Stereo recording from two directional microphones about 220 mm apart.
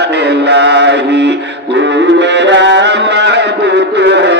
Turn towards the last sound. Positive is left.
turn(degrees=-50)  # may be behind; listen again after turning